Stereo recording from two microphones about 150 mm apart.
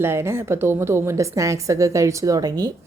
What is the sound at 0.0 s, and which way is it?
A woman's voice, 15° right (ahead or behind).